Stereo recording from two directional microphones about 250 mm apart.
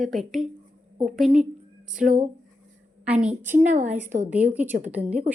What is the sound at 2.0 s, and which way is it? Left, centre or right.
Speech, right.